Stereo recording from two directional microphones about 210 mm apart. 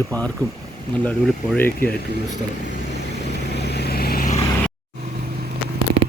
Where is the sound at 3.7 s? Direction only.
50° left (ahead or behind).